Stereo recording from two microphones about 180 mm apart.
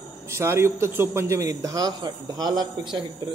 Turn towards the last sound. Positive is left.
turn(degrees=-25)  # may be behind; listen again after turning